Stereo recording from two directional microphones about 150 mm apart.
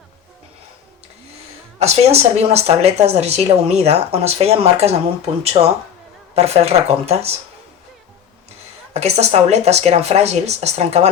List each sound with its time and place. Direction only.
1.8 s speech: 45° right (ahead or behind)
8.9 s speech: 45° right (ahead or behind)